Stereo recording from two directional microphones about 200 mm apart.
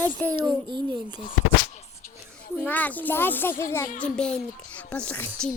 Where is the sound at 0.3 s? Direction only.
25° right (ahead or behind).